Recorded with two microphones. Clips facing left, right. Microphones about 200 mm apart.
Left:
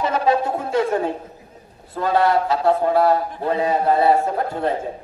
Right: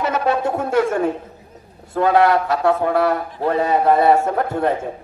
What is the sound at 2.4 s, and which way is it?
A man's voice, 65° right (ahead or behind).